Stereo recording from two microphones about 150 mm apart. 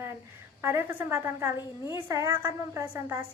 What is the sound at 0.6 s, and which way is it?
A woman's voice, 15° right (ahead or behind).